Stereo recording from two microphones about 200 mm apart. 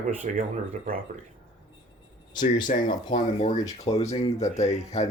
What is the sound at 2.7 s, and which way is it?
Speech, 40° left (ahead or behind).